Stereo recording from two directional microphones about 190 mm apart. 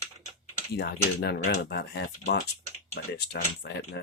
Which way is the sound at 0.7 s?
60° left (ahead or behind).